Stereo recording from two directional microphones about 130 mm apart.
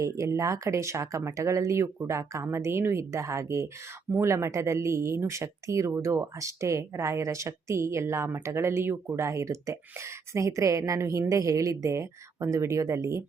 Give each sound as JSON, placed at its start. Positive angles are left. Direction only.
{"t": 0.0, "sound": "speech", "side_deg": -20}